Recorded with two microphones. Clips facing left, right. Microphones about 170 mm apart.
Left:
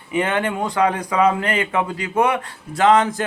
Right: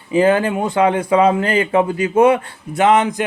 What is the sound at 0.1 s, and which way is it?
Speech, 30° right (ahead or behind).